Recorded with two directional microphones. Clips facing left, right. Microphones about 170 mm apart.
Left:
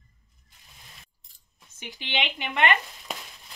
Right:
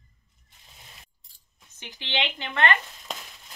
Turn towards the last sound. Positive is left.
turn(degrees=15)  # may be behind; listen again after turning